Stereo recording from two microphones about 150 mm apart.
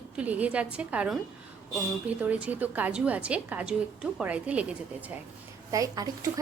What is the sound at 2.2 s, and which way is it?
A woman's voice, 10° right (ahead or behind).